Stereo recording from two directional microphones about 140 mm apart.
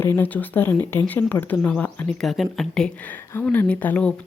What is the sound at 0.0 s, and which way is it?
Speech, 15° left (ahead or behind).